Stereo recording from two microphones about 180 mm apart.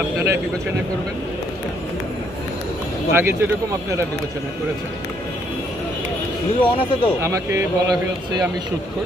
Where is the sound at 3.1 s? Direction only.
10° right (ahead or behind).